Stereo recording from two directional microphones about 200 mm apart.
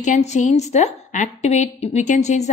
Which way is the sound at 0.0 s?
35° left (ahead or behind).